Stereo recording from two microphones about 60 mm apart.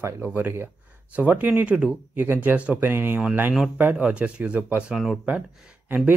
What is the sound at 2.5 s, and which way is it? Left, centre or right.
Speech, right.